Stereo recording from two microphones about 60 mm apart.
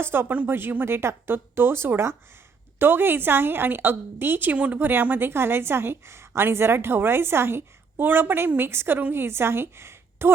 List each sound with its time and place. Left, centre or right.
0.0 s a woman's voice: right
4.5 s speech: right
4.8 s a woman's voice: right